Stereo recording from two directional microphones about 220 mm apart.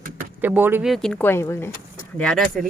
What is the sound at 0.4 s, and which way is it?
Speech, 10° right (ahead or behind).